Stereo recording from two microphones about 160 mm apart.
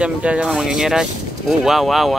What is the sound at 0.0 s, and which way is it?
Speech, 5° right (ahead or behind).